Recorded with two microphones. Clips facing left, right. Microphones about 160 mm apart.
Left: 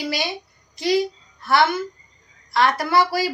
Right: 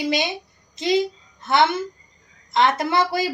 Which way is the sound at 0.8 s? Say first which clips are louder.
Even; 20° right (ahead or behind).